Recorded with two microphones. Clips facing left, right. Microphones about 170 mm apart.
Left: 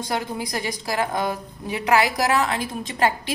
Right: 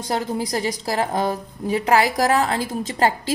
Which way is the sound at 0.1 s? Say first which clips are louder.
Right 5 dB; 35° right (ahead or behind).